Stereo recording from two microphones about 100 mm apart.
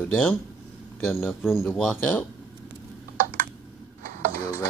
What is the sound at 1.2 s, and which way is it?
Speech, centre (ahead or behind).